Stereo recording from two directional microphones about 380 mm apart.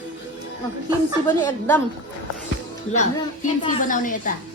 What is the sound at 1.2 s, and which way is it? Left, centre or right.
Speech, centre.